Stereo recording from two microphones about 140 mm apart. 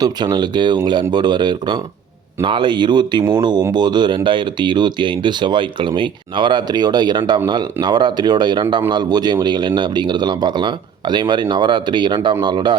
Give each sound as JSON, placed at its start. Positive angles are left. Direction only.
{"t": 0.0, "sound": "speech", "side_deg": -30}